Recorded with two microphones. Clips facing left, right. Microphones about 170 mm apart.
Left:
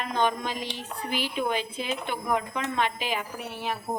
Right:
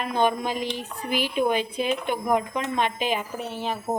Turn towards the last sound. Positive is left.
turn(degrees=-25)  # may be behind; listen again after turning